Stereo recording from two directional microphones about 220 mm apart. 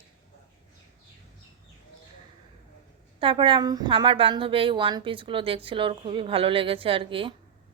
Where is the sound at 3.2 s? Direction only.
20° right (ahead or behind).